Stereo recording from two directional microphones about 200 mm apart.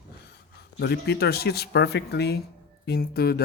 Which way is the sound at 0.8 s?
55° left (ahead or behind).